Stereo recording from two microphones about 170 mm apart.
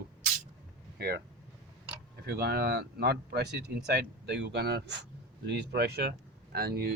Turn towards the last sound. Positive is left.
turn(degrees=-65)  # may be behind; listen again after turning